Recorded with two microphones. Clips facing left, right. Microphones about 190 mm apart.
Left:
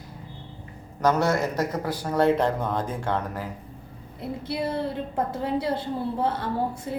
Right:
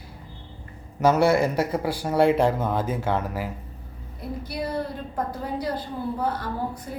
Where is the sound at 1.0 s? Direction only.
10° right (ahead or behind).